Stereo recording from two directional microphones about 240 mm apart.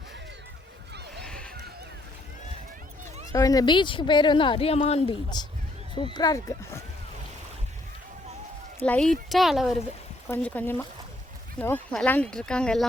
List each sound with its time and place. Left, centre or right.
1.2 s a sound: centre
3.3 s a woman's voice: centre
8.9 s speech: centre